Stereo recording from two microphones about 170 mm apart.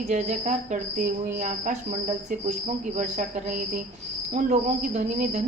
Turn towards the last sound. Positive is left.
turn(degrees=-40)  # may be behind; listen again after turning